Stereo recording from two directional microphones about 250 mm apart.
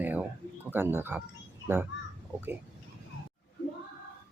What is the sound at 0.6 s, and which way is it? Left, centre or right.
Speech, centre.